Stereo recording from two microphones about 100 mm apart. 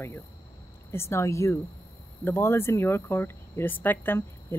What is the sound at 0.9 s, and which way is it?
Speech, 25° left (ahead or behind).